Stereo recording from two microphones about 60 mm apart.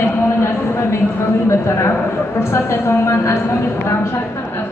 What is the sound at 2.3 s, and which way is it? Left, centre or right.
Speech, left.